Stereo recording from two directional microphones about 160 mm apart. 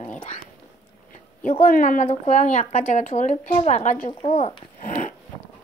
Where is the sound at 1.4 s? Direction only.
55° left (ahead or behind).